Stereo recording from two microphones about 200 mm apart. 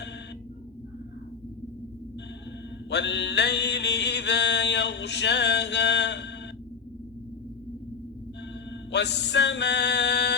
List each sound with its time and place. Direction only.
2.9 s mantra: 60° left (ahead or behind)
8.9 s mantra: 60° left (ahead or behind)